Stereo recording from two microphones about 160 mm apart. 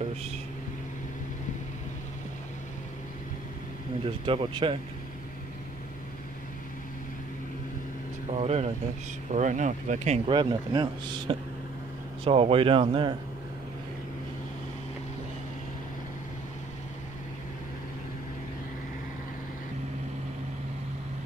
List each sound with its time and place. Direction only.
4.0 s speech: 35° right (ahead or behind)
8.3 s speech: 40° right (ahead or behind)